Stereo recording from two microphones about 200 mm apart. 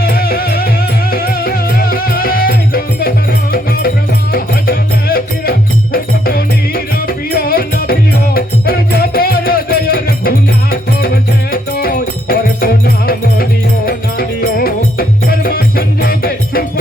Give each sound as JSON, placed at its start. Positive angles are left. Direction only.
{"t": 0.0, "sound": "music", "side_deg": 50}